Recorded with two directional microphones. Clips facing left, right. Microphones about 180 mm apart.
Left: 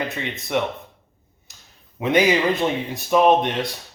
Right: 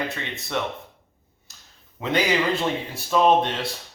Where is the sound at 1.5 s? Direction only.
20° left (ahead or behind).